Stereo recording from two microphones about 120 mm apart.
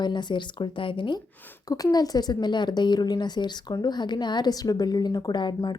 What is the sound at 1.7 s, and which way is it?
Speech, 30° left (ahead or behind).